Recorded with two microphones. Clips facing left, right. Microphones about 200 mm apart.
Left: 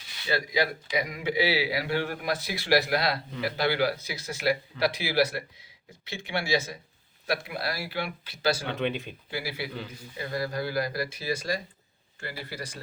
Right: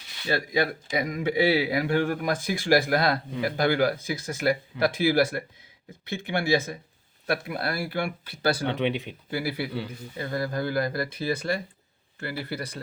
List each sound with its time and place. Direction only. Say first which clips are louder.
0.3 s a man's voice: right 2 dB; 50° right (ahead or behind)
8.6 s speech: right 3 dB; 20° right (ahead or behind)
9.3 s a man's voice: right 5 dB; 55° right (ahead or behind)